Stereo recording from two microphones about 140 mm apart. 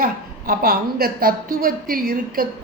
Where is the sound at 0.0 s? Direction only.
90° right.